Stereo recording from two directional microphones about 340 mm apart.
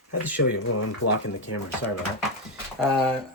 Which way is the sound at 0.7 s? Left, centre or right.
Left.